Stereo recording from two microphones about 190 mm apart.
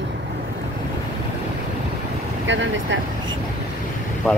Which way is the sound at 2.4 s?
75° right (ahead or behind).